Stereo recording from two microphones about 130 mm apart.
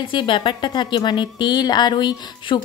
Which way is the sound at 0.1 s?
40° left (ahead or behind).